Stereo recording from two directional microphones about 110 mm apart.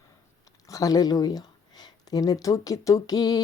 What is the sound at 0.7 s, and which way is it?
Speech, 35° left (ahead or behind).